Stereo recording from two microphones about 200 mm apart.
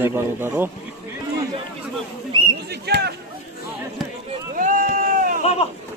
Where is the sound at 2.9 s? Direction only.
50° right (ahead or behind).